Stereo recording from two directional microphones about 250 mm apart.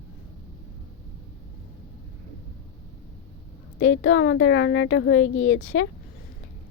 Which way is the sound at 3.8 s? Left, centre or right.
Left.